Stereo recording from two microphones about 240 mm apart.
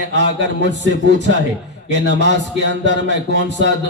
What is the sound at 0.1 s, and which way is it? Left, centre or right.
Speech, right.